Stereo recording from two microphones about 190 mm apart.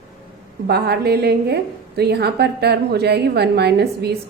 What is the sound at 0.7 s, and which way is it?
A woman's voice, 60° right (ahead or behind).